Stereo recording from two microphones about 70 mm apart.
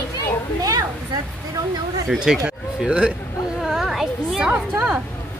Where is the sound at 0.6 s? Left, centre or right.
Right.